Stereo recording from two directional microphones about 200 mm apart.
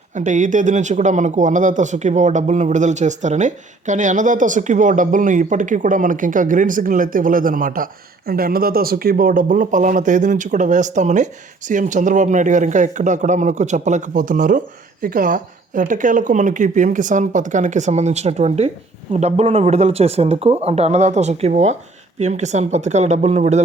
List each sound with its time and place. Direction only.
0.1 s speech: 40° right (ahead or behind)